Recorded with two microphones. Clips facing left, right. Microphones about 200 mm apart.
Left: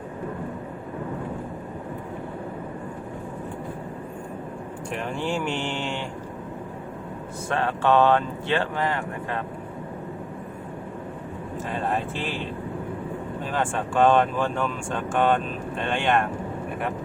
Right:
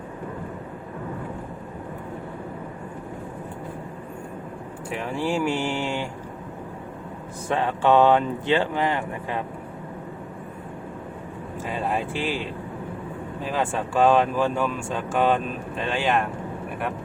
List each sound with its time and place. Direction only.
4.9 s speech: 5° right (ahead or behind)
7.4 s speech: 15° right (ahead or behind)
11.9 s speech: 10° right (ahead or behind)
13.5 s speech: 5° right (ahead or behind)